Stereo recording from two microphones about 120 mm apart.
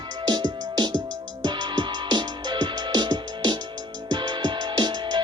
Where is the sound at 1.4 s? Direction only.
35° right (ahead or behind).